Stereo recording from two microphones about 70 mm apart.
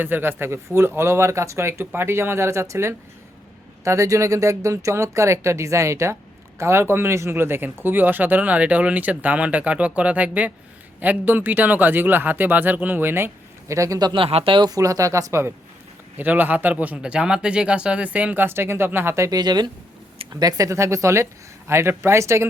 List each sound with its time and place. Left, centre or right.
0.0 s speech: right
13.7 s speech: right
16.1 s speech: right
18.4 s speech: right
19.3 s speech: right
20.3 s speech: right
20.7 s speech: right